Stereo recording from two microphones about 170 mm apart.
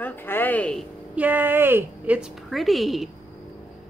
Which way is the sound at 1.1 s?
10° right (ahead or behind).